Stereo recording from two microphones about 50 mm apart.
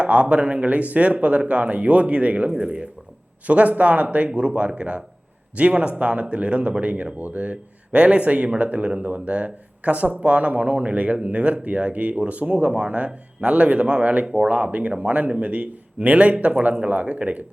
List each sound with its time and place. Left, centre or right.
0.0 s speech: right